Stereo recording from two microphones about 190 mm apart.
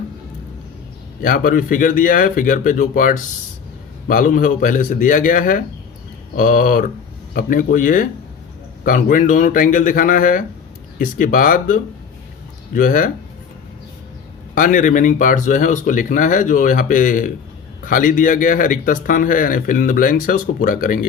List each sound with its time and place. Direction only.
1.2 s speech: 50° left (ahead or behind)
14.5 s speech: 45° left (ahead or behind)